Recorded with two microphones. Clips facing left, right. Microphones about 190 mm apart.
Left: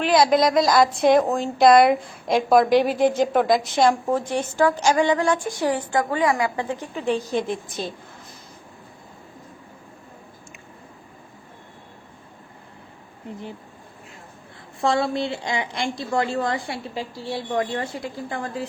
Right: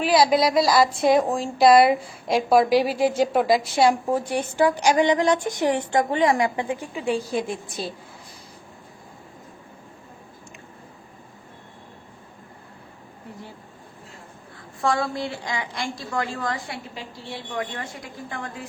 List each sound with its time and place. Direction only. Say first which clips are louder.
0.0 s a woman's voice: left 1 dB; 5° right (ahead or behind)
14.8 s a woman's voice: left 3 dB; 25° left (ahead or behind)